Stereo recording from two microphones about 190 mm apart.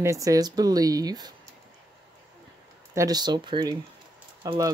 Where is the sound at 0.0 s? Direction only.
15° right (ahead or behind).